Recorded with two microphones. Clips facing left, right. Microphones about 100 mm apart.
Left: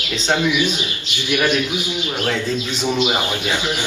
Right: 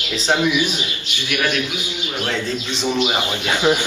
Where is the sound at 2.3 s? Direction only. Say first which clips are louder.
Left 1 dB; 5° left (ahead or behind).